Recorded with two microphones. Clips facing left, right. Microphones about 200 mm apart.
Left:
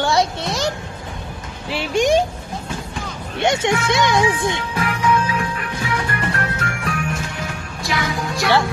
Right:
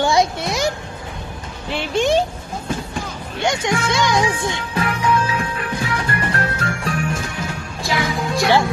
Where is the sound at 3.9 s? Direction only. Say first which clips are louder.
Left 1 dB; 20° left (ahead or behind).